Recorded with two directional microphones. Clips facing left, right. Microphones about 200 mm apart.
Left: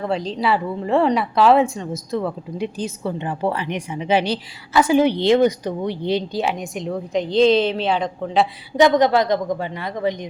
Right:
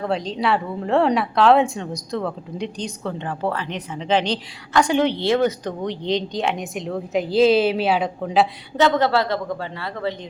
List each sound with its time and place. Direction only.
0.0 s a woman's voice: centre (ahead or behind)
8.7 s a woman's voice: 15° left (ahead or behind)